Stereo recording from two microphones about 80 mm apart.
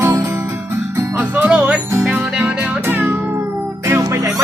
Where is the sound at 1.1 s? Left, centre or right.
Right.